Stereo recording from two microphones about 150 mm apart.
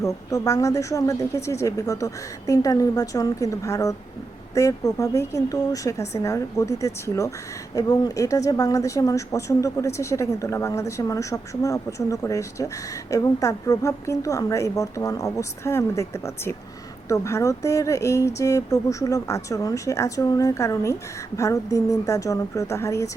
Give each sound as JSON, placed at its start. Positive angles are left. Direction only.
{"t": 0.0, "sound": "speech", "side_deg": 20}